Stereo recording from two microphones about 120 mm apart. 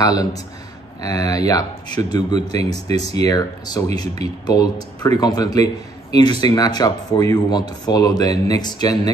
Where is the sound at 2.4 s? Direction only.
60° right (ahead or behind).